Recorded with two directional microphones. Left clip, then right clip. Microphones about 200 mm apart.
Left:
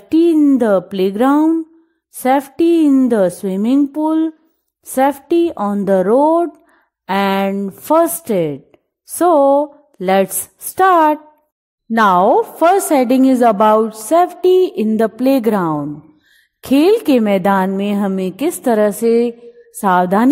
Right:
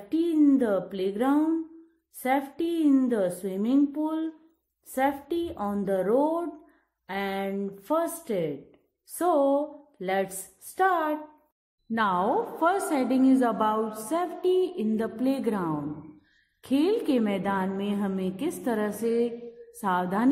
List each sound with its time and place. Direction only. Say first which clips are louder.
0.1 s a woman's voice: left 12 dB; 45° left (ahead or behind)